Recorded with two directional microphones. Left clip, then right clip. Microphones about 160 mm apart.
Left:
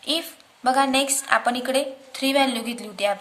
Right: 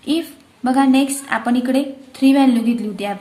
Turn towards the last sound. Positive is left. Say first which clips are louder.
# right 2 dB
turn(degrees=20)  # may be behind; listen again after turning